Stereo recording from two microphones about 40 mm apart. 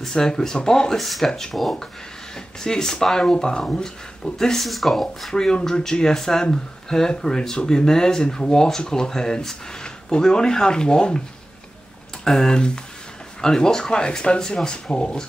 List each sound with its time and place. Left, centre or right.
0.0 s speech: centre
0.9 s speech: centre
2.3 s speech: centre
4.6 s speech: centre
5.3 s speech: centre
12.3 s speech: centre